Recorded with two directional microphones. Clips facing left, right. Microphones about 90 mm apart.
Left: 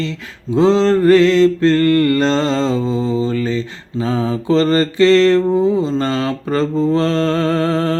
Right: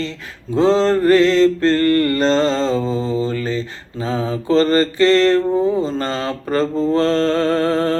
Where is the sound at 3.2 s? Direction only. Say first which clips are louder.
Left 3 dB; 35° right (ahead or behind).